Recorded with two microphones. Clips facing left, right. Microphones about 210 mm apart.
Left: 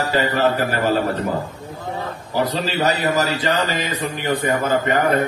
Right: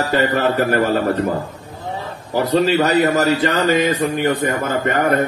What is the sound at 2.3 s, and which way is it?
A man's voice, 50° right (ahead or behind).